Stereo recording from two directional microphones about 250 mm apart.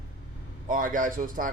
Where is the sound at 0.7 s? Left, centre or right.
Right.